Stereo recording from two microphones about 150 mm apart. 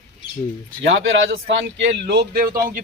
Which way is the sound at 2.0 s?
90° right.